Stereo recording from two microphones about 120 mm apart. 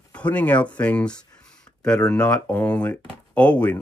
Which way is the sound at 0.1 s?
10° left (ahead or behind).